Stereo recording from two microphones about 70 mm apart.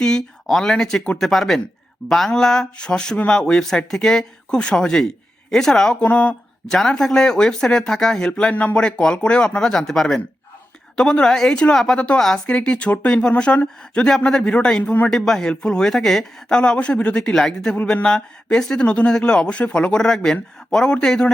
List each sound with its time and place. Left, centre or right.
0.0 s speech: centre
6.0 s speech: centre
6.7 s speech: centre
15.1 s speech: centre